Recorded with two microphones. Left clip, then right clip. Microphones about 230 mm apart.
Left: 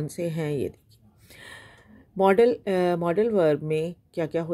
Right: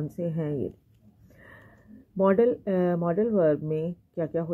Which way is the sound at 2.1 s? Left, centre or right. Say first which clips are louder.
Left 3 dB; left.